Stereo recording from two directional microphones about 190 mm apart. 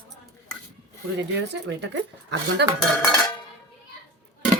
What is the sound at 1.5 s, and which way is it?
Speech, 65° right (ahead or behind).